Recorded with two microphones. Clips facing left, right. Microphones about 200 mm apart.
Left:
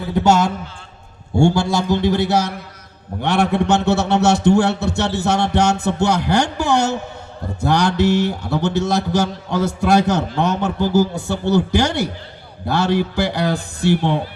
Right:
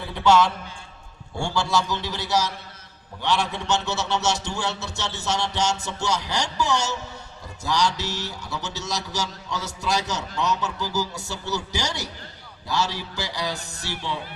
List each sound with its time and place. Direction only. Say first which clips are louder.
0.1 s a man's voice: left 3 dB; 45° left (ahead or behind)